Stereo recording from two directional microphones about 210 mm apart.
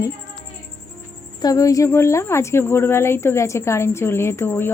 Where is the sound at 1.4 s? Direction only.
15° left (ahead or behind).